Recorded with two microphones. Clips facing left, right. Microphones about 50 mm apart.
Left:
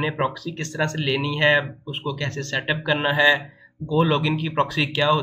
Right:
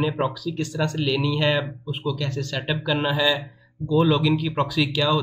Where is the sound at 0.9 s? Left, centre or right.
Left.